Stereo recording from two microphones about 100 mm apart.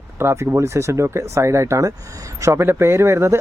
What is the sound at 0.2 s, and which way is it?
Speech, 25° right (ahead or behind).